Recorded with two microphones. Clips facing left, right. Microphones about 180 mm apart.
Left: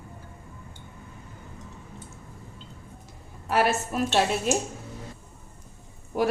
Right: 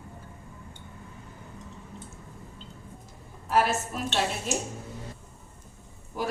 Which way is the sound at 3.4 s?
70° left (ahead or behind).